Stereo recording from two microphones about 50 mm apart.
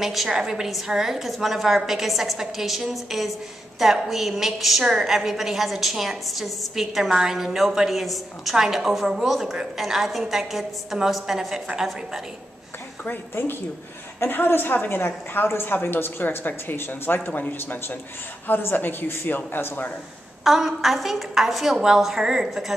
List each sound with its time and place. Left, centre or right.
0.0 s a woman's voice: centre
13.3 s a woman's voice: left
20.4 s a woman's voice: centre